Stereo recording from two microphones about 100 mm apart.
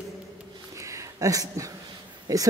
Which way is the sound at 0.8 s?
30° right (ahead or behind).